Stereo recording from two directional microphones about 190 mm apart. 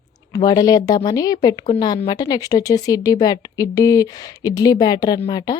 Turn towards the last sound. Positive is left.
turn(degrees=20)  # may be behind; listen again after turning